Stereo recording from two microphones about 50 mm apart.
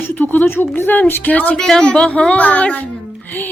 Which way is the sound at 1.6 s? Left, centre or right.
Centre.